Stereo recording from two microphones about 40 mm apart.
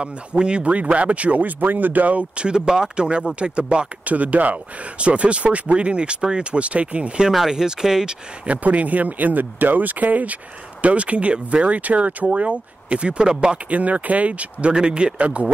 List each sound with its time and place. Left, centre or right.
0.0 s speech: right
2.3 s speech: right
7.3 s speech: centre
8.5 s speech: right
13.7 s speech: right
14.7 s speech: right